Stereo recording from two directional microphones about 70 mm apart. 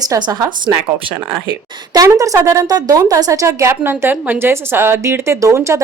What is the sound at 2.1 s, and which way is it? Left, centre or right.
A woman's voice, right.